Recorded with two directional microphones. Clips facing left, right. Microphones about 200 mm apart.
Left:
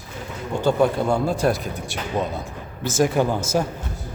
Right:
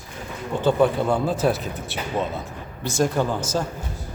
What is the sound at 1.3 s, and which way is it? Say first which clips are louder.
A man's voice: left 1 dB; 5° right (ahead or behind).